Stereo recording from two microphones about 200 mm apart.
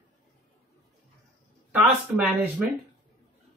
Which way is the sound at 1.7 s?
5° right (ahead or behind).